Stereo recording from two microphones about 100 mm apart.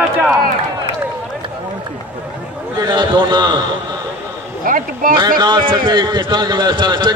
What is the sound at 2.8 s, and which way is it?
Speech, 50° right (ahead or behind).